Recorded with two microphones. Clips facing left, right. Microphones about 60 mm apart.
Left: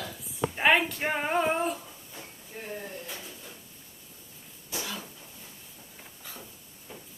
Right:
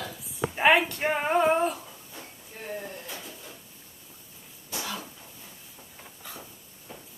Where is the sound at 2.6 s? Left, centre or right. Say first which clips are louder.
Right 2 dB; centre.